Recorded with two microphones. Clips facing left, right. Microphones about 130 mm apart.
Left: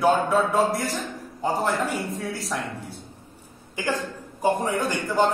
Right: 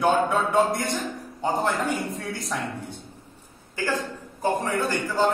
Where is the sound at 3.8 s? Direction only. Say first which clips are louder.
Even; 20° left (ahead or behind).